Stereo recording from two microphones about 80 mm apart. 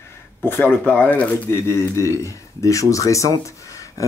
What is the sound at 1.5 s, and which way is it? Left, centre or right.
Speech, left.